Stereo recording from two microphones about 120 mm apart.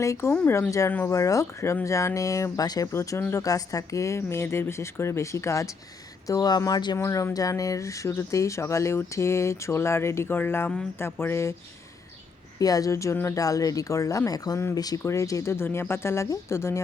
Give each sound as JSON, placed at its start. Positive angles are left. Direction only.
{"t": 0.0, "sound": "speech", "side_deg": 25}
{"t": 12.5, "sound": "speech", "side_deg": 30}